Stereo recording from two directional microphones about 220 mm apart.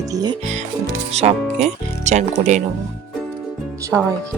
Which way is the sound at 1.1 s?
30° right (ahead or behind).